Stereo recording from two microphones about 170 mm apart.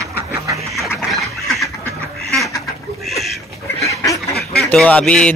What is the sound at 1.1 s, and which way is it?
Duck, centre (ahead or behind).